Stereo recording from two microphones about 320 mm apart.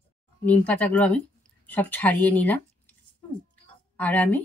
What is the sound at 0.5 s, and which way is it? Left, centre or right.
A woman's voice, centre.